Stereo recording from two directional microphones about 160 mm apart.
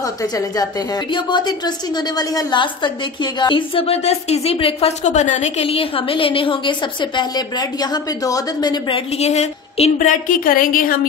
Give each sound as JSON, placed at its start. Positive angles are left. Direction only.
{"t": 0.0, "sound": "a woman's voice", "side_deg": 20}